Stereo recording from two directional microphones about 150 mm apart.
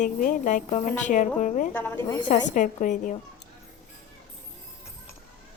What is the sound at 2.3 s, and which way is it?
Speech, 55° left (ahead or behind).